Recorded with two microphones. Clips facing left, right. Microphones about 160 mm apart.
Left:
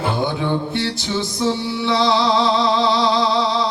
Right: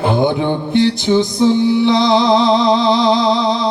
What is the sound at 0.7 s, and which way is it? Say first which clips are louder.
Music: right 10 dB; 20° right (ahead or behind).